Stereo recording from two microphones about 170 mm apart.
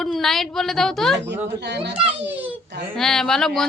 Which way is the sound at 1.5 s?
85° right.